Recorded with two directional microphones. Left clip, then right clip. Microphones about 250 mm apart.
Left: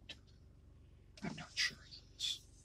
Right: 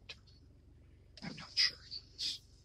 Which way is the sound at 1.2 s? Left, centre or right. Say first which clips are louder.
Right 5 dB; centre.